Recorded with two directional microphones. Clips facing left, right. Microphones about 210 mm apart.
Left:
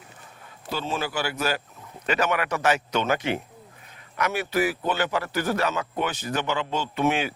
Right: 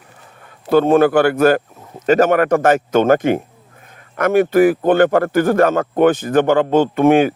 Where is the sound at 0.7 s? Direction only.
55° right (ahead or behind).